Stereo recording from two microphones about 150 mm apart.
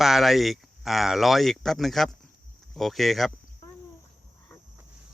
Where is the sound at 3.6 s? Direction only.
20° left (ahead or behind).